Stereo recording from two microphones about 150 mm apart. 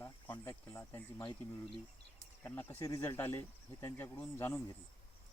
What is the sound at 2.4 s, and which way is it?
Speech, 15° left (ahead or behind).